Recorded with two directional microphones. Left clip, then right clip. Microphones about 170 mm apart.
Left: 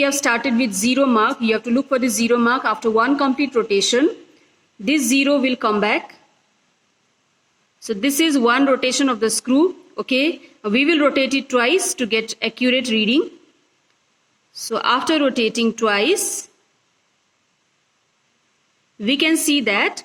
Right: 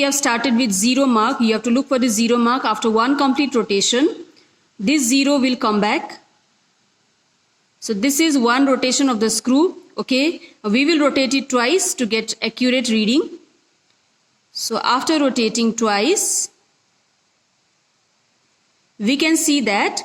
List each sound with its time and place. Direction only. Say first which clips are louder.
0.0 s speech: even; 35° right (ahead or behind)
7.8 s speech: right 1 dB; 35° right (ahead or behind)
14.5 s speech: even; 35° right (ahead or behind)
18.9 s speech: even; 35° right (ahead or behind)